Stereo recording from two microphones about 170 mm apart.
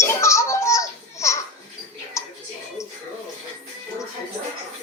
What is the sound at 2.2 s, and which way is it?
Music, 15° left (ahead or behind).